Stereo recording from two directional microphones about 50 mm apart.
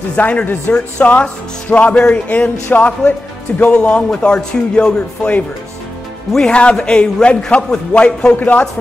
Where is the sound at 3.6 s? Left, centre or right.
Centre.